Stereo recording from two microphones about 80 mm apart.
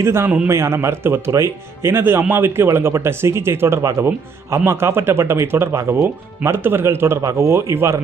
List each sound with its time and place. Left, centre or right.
0.0 s speech: right